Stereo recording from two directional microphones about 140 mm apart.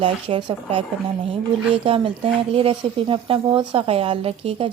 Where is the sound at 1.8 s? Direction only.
40° right (ahead or behind).